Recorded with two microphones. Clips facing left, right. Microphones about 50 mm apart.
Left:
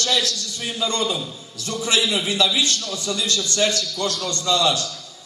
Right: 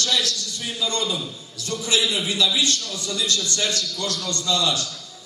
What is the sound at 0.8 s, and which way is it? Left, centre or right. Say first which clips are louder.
A man's voice: left 2 dB; left.